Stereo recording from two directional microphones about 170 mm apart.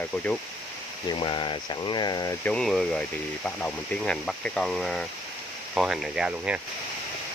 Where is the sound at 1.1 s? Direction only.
30° left (ahead or behind).